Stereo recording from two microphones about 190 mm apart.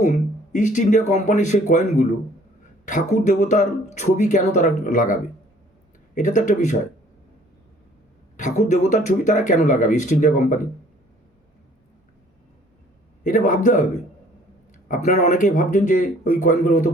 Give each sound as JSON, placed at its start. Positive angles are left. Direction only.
{"t": 0.0, "sound": "speech", "side_deg": 40}
{"t": 8.4, "sound": "speech", "side_deg": 40}
{"t": 13.2, "sound": "speech", "side_deg": 40}
{"t": 14.8, "sound": "speech", "side_deg": 40}